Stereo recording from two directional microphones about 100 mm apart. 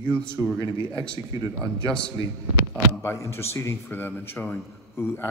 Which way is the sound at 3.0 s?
25° left (ahead or behind).